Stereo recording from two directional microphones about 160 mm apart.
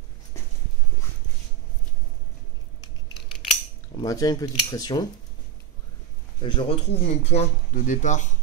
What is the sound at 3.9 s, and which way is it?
Speech, 25° left (ahead or behind).